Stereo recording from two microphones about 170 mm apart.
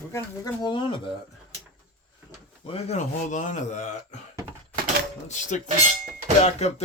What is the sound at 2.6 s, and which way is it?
Speech, 40° left (ahead or behind).